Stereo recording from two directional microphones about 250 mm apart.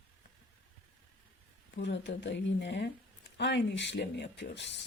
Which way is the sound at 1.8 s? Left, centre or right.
Left.